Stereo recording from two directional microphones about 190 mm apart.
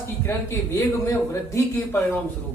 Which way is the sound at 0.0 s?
15° left (ahead or behind).